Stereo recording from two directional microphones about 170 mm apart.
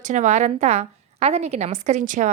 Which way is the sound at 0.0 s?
45° right (ahead or behind).